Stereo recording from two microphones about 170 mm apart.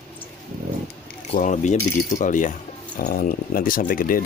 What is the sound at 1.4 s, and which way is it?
Speech, 45° left (ahead or behind).